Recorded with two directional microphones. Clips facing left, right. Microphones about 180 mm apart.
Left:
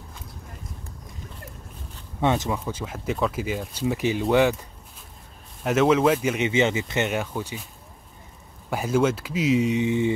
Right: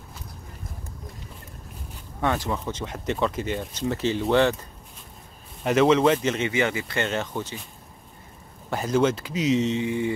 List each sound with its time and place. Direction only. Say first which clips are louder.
2.2 s speech: left 2 dB; 20° left (ahead or behind)
2.6 s speech: even; 5° left (ahead or behind)
5.6 s speech: right 1 dB; centre (ahead or behind)
8.6 s speech: even; 5° left (ahead or behind)
9.8 s speech: left 3 dB; 20° left (ahead or behind)